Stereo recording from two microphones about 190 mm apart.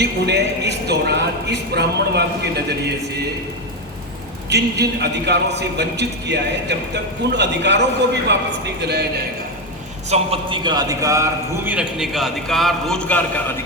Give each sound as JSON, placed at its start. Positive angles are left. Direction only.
{"t": 0.0, "sound": "a man's voice", "side_deg": -60}
{"t": 4.4, "sound": "a man's voice", "side_deg": -60}
{"t": 10.1, "sound": "a man's voice", "side_deg": -30}